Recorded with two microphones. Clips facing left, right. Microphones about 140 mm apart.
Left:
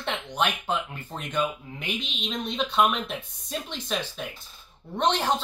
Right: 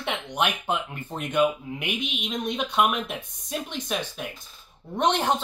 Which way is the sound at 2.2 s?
60° right (ahead or behind).